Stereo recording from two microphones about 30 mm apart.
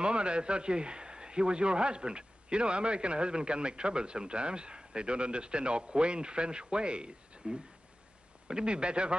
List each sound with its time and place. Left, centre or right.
0.0 s a man's voice: right